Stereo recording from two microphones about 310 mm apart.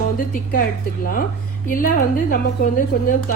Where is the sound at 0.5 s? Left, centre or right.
Left.